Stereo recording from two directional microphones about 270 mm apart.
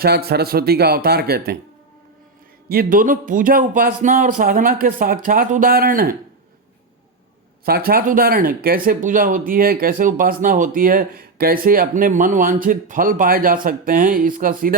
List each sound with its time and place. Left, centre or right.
0.0 s speech: right
2.6 s speech: right
7.9 s speech: right